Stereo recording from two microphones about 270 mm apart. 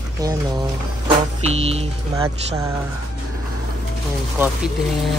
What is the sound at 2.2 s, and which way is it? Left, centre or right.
Speech, centre.